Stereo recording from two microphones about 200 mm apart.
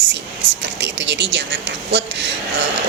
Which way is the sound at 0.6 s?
65° right (ahead or behind).